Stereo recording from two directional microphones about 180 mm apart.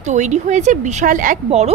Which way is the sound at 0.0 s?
40° right (ahead or behind).